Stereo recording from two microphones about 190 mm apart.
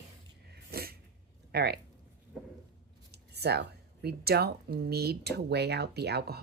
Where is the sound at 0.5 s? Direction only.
55° right (ahead or behind).